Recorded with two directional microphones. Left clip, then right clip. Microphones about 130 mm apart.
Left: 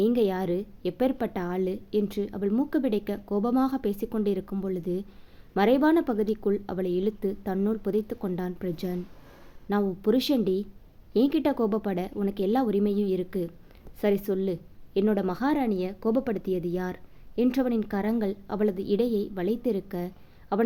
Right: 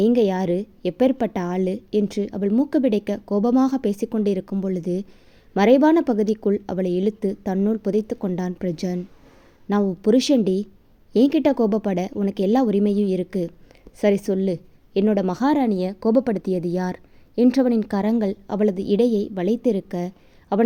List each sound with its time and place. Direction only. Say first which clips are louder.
0.0 s a woman's voice: right 6 dB; 40° right (ahead or behind)